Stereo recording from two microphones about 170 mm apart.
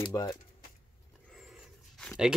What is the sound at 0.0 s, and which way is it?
Speech, 20° left (ahead or behind).